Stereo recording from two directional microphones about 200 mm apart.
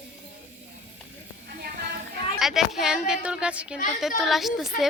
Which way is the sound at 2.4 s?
Centre (ahead or behind).